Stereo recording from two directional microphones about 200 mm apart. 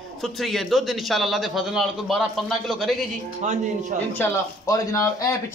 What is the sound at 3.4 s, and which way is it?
Speech, 35° right (ahead or behind).